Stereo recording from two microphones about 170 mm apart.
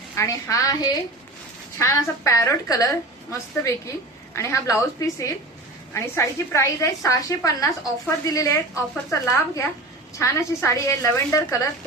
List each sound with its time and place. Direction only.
0.2 s a woman's voice: 20° left (ahead or behind)
10.2 s a woman's voice: 15° left (ahead or behind)